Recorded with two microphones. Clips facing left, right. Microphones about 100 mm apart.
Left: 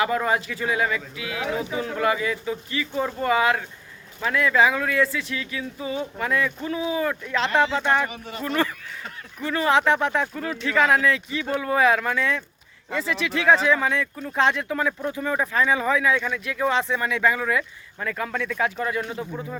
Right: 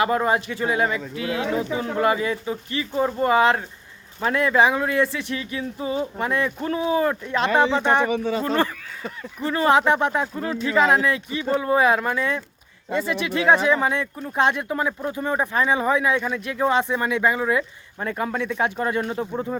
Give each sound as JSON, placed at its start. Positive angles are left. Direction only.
{"t": 0.0, "sound": "speech", "side_deg": -30}
{"t": 6.6, "sound": "speech", "side_deg": -40}
{"t": 7.5, "sound": "speech", "side_deg": -15}
{"t": 9.7, "sound": "speech", "side_deg": -15}
{"t": 10.4, "sound": "speech", "side_deg": -30}